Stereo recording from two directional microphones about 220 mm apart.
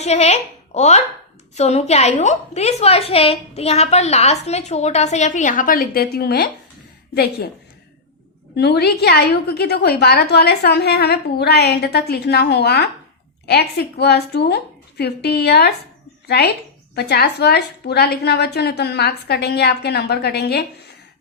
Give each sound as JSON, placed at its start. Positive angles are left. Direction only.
{"t": 0.0, "sound": "a woman's voice", "side_deg": 30}
{"t": 8.5, "sound": "a woman's voice", "side_deg": 50}